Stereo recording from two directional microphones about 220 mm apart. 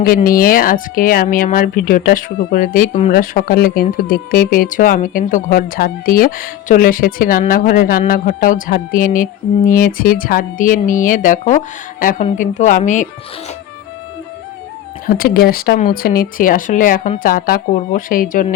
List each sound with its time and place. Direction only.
0.0 s speech: 40° left (ahead or behind)
15.0 s speech: 45° left (ahead or behind)